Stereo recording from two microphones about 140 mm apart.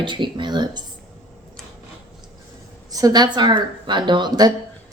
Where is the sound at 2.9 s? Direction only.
30° right (ahead or behind).